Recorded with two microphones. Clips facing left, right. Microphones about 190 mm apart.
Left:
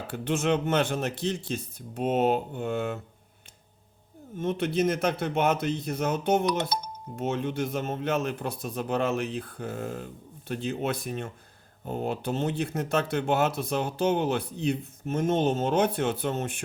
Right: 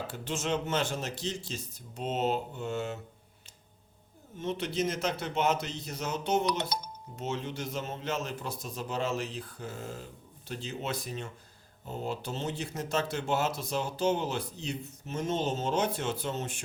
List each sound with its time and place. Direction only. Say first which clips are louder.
0.1 s a man's voice: left 9 dB; 60° left (ahead or behind)
4.4 s a man's voice: left 5 dB; 55° left (ahead or behind)